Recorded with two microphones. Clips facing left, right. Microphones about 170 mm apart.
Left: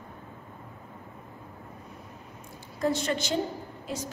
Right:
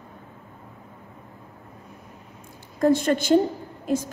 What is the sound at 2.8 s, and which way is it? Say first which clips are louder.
A woman's voice: right 8 dB; 50° right (ahead or behind).